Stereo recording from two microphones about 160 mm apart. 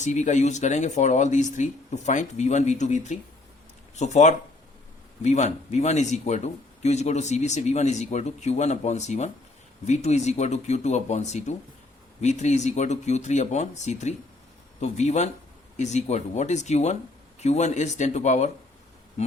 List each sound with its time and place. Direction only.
0.0 s speech: 50° left (ahead or behind)